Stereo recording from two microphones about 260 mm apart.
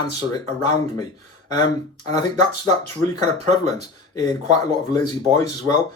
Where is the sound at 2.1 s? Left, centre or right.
Centre.